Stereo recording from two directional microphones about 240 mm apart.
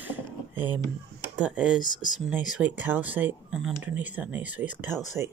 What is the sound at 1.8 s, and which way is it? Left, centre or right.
Speech, centre.